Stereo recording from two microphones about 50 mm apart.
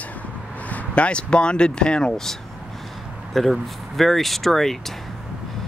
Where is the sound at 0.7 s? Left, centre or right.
Left; by 2.3 s centre.